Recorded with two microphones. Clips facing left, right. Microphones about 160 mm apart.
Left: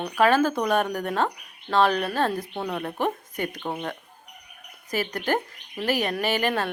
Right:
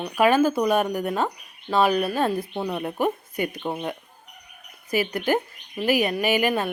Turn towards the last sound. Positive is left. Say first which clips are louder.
# right 3 dB
turn(degrees=-10)  # may be behind; listen again after turning